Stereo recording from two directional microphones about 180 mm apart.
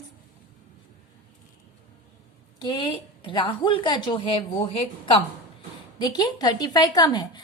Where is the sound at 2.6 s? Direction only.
25° left (ahead or behind).